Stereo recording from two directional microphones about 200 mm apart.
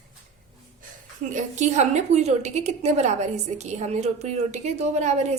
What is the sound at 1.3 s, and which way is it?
A woman's voice, 35° right (ahead or behind).